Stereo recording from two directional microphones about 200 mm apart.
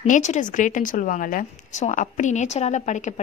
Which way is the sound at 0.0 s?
35° left (ahead or behind).